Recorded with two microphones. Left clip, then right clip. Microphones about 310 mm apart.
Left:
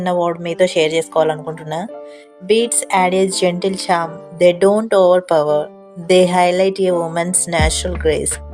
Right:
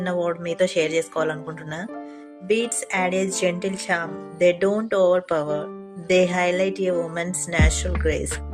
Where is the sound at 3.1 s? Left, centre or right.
Centre.